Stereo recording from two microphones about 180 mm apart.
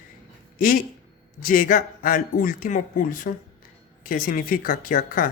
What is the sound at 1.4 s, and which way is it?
Speech, 50° left (ahead or behind).